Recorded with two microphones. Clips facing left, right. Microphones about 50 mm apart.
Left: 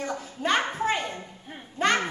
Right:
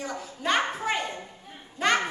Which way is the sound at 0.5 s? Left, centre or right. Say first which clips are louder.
Left 1 dB; centre.